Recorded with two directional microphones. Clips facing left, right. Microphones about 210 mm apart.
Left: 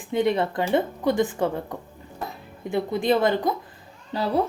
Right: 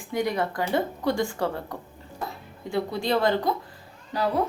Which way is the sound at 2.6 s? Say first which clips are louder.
Left 4 dB; 20° left (ahead or behind).